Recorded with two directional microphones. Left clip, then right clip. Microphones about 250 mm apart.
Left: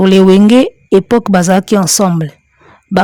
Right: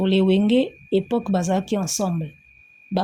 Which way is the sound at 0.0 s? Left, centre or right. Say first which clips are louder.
Left 13 dB; left.